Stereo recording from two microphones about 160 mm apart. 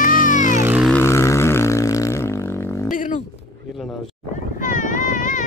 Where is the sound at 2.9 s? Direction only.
55° left (ahead or behind).